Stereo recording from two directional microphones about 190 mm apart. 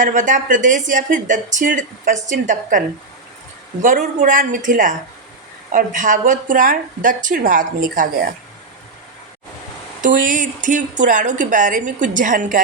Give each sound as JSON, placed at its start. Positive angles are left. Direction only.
{"t": 0.0, "sound": "speech", "side_deg": -45}
{"t": 3.8, "sound": "speech", "side_deg": -45}
{"t": 10.2, "sound": "speech", "side_deg": -45}